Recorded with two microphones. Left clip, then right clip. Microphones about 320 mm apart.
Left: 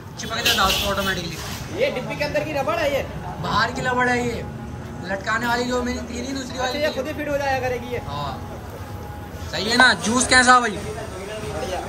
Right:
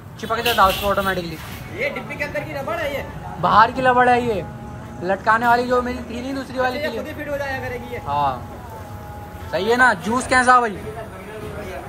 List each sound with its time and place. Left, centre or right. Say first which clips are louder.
0.2 s a woman's voice: right 3 dB; centre
1.8 s a woman's voice: left 2 dB; centre
9.5 s a woman's voice: right 1 dB; centre